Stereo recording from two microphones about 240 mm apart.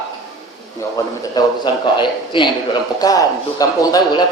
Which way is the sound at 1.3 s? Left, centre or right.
Centre.